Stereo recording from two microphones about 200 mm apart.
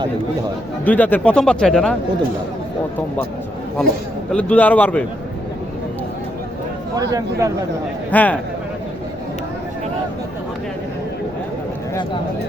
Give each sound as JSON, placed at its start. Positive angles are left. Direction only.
{"t": 0.9, "sound": "speech", "side_deg": 10}
{"t": 4.3, "sound": "a man's voice", "side_deg": 5}
{"t": 6.9, "sound": "speech", "side_deg": -20}
{"t": 8.1, "sound": "a man's voice", "side_deg": 10}